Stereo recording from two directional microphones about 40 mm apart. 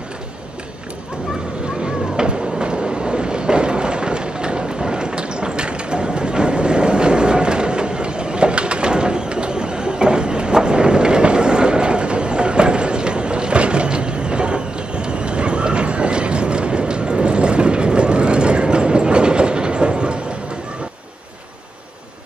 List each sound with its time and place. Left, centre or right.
2.1 s train: right